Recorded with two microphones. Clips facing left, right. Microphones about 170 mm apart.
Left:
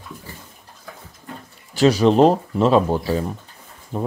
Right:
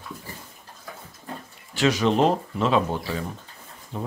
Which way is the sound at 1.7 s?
35° left (ahead or behind).